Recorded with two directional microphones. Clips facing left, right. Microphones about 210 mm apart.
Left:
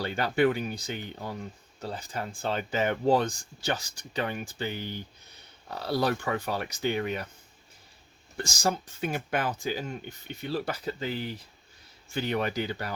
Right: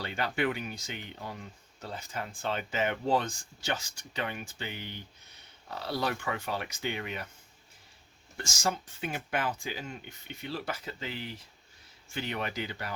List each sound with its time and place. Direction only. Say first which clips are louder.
0.0 s speech: left 6 dB; 40° left (ahead or behind)
8.4 s speech: left 4 dB; 35° left (ahead or behind)